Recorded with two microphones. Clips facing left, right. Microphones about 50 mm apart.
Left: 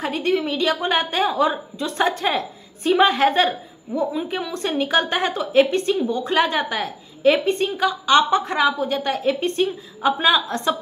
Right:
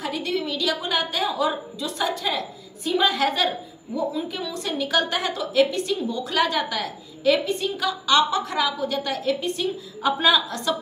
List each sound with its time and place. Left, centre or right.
0.0 s a woman's voice: left
10.0 s a woman's voice: centre
10.5 s a woman's voice: left